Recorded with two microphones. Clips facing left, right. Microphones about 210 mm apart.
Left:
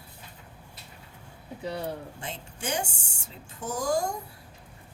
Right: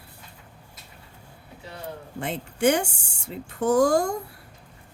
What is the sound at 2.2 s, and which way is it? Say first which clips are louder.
A woman's voice: right 13 dB; 65° right (ahead or behind).